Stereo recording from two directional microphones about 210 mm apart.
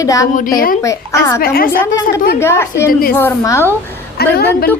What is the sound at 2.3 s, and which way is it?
A woman's voice, 10° left (ahead or behind).